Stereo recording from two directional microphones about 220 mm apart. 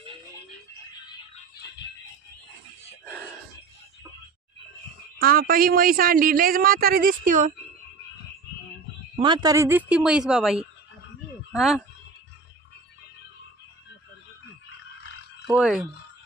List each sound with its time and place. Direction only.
5.2 s a man's voice: 40° right (ahead or behind)
9.1 s speech: 20° right (ahead or behind); by 11.8 s centre (ahead or behind)
15.4 s speech: 5° right (ahead or behind)